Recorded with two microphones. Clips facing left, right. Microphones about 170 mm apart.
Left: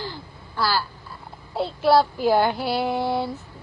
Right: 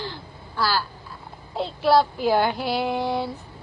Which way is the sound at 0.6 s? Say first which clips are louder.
Even; 10° left (ahead or behind).